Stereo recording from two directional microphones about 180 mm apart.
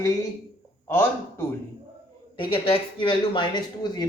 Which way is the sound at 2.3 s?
30° left (ahead or behind).